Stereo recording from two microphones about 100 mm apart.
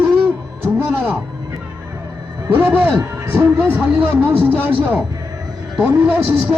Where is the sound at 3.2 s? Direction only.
25° right (ahead or behind).